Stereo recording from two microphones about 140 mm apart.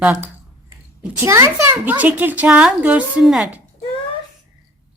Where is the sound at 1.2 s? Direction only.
20° right (ahead or behind).